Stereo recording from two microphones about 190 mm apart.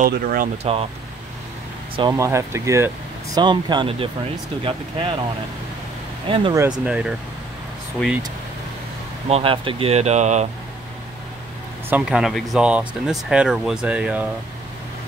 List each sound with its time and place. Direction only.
0.0 s speech: 50° right (ahead or behind)
2.0 s speech: 20° right (ahead or behind)
6.2 s speech: 30° right (ahead or behind)
6.5 s speech: 15° right (ahead or behind)
9.3 s speech: 30° right (ahead or behind)
11.9 s speech: 5° right (ahead or behind)